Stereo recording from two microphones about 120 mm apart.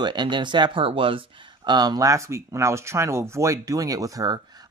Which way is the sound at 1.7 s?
35° right (ahead or behind).